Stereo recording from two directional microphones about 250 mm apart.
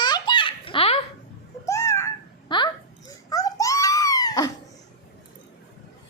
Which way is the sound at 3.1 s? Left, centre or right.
Centre.